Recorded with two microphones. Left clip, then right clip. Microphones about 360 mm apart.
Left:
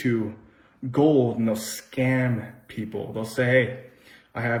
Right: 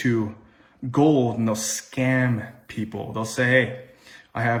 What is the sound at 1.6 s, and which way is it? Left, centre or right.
A man's voice, right.